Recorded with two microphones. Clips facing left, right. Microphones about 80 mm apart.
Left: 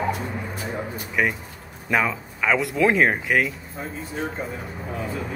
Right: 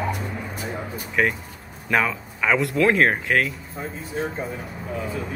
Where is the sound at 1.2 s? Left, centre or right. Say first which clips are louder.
Right 1 dB; centre.